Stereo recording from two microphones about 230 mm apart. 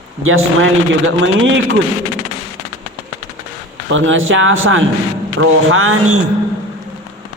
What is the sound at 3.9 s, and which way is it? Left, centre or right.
A man's voice, right.